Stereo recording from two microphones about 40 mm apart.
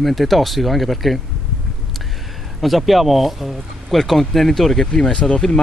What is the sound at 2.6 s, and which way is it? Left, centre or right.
A man's voice, centre.